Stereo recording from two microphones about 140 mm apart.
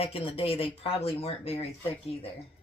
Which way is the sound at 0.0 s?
45° left (ahead or behind).